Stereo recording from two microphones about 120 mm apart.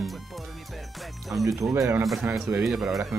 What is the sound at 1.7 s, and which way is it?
Speech, 20° right (ahead or behind).